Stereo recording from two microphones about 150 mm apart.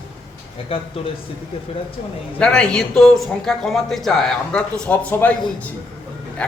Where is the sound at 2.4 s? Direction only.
5° left (ahead or behind).